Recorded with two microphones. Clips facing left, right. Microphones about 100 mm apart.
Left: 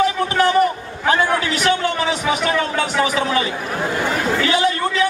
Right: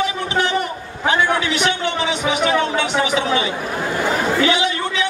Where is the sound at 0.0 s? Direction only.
40° left (ahead or behind).